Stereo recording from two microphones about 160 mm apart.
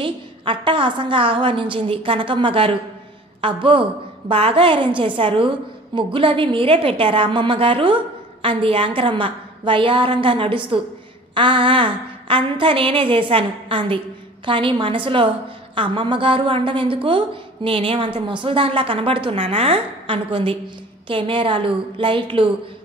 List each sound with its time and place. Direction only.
0.0 s a woman's voice: 30° right (ahead or behind)